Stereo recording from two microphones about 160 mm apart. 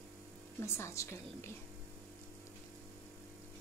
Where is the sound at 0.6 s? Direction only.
15° left (ahead or behind).